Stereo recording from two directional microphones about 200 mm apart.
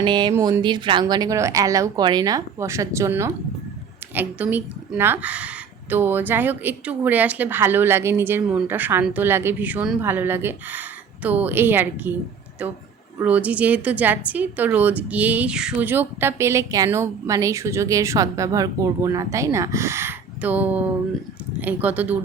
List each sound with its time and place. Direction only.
0.0 s speech: 25° right (ahead or behind)
0.3 s a woman's voice: 10° right (ahead or behind)
0.6 s a woman's voice: 25° right (ahead or behind)
13.1 s a woman's voice: 5° right (ahead or behind)